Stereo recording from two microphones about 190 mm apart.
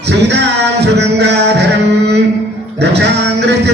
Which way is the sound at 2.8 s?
65° right (ahead or behind).